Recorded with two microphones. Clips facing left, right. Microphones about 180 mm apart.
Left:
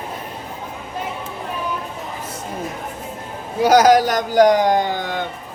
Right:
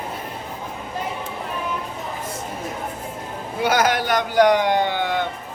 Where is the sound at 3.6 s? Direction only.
40° left (ahead or behind).